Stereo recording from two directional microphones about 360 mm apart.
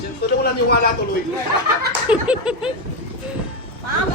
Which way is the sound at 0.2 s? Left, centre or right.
Left.